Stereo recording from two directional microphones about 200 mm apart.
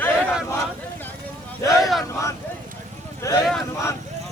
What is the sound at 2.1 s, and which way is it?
Battle cry, 15° left (ahead or behind).